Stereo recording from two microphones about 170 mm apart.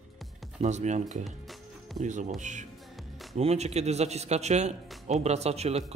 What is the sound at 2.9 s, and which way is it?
Music, centre (ahead or behind).